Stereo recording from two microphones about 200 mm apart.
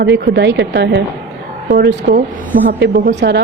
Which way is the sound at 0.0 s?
60° right (ahead or behind).